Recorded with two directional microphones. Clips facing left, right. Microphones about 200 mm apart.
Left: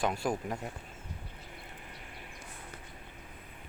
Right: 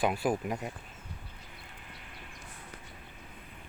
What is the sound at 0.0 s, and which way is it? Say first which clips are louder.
Speech: right 3 dB; 5° right (ahead or behind).